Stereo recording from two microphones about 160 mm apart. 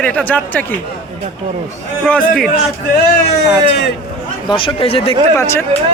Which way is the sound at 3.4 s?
90° left.